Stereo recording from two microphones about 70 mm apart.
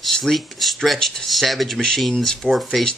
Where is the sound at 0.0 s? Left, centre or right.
Centre.